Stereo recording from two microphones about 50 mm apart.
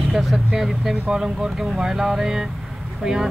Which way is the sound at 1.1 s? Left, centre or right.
Centre.